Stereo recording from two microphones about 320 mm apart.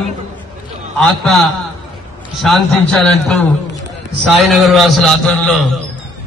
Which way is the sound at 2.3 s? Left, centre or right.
Centre.